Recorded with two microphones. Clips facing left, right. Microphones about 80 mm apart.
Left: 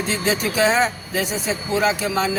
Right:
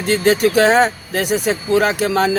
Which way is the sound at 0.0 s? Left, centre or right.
Right.